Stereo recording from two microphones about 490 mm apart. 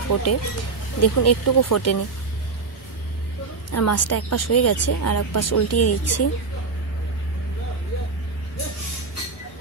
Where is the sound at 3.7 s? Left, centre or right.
Left.